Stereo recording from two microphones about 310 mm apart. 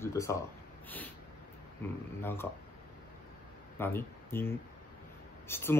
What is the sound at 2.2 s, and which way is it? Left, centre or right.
Speech, centre.